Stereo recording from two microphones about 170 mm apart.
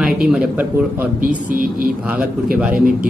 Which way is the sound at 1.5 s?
55° right (ahead or behind).